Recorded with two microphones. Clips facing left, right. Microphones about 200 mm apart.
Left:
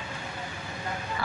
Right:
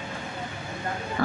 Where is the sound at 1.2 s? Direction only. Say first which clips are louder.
Right 8 dB; 50° right (ahead or behind).